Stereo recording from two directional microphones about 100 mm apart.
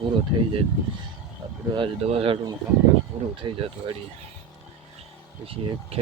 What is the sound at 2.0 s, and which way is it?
Speech, 70° right (ahead or behind).